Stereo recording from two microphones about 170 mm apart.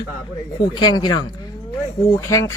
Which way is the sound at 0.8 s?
25° left (ahead or behind).